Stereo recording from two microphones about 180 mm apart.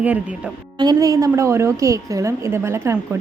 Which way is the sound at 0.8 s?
20° right (ahead or behind).